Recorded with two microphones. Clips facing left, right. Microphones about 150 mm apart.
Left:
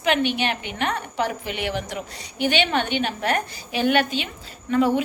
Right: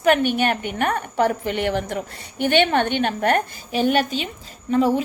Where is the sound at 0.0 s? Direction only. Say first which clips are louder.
Right 4 dB; 45° right (ahead or behind).